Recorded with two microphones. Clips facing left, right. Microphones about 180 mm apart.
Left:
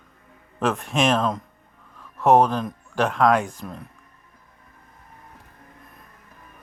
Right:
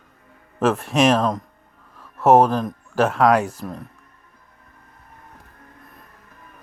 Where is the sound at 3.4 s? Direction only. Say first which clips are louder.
Right 3 dB; 35° right (ahead or behind).